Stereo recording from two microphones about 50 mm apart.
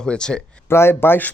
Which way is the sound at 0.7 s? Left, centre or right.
Left.